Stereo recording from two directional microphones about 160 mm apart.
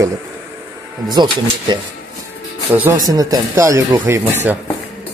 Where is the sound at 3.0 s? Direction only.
25° right (ahead or behind).